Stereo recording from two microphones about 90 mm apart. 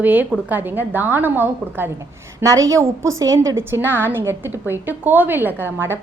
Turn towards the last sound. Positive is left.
turn(degrees=-25)  # may be behind; listen again after turning